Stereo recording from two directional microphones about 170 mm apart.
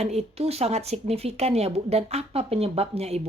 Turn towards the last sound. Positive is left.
turn(degrees=-35)  # may be behind; listen again after turning